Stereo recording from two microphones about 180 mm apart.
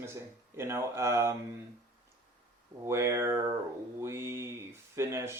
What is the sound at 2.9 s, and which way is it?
Speech, 15° right (ahead or behind).